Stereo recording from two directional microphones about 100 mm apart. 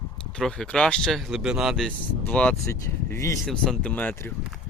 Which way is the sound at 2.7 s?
30° left (ahead or behind).